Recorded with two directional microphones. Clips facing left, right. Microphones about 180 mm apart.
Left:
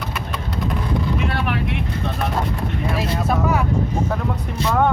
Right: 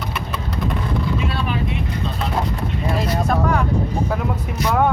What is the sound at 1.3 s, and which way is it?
Vehicle, 65° left (ahead or behind).